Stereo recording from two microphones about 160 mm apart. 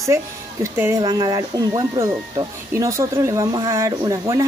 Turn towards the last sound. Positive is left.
turn(degrees=-20)  # may be behind; listen again after turning